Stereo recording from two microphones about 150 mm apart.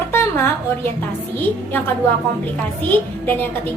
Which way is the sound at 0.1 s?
15° left (ahead or behind).